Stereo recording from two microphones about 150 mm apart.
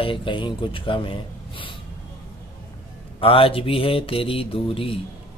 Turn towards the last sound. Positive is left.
turn(degrees=40)  # may be behind; listen again after turning